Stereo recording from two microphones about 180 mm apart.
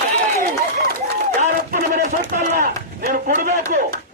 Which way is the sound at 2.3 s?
50° right (ahead or behind).